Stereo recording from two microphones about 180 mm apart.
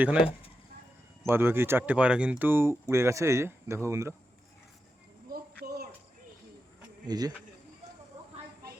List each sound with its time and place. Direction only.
0.0 s speech: 5° right (ahead or behind)
5.3 s a sound: 55° right (ahead or behind)
7.1 s speech: 20° right (ahead or behind)